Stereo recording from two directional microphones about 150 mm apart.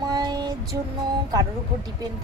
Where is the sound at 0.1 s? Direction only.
25° right (ahead or behind).